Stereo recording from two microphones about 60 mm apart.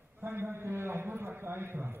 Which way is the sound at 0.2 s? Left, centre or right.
Right.